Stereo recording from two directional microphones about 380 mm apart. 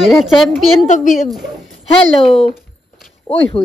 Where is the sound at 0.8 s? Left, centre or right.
Centre.